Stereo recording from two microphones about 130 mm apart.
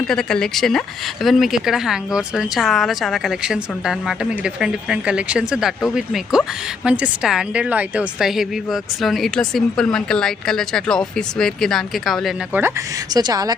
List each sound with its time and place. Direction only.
0.1 s a woman's voice: 5° left (ahead or behind)
13.1 s a woman's voice: 30° right (ahead or behind)